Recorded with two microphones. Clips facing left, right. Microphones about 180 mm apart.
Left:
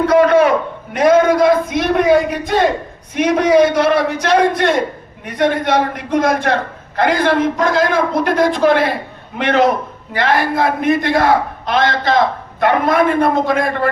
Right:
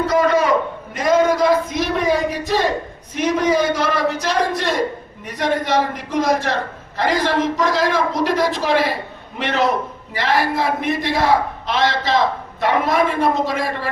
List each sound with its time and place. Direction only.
0.0 s a sound: 60° left (ahead or behind)
3.2 s a man's voice: 60° left (ahead or behind)
10.2 s a man's voice: 55° left (ahead or behind)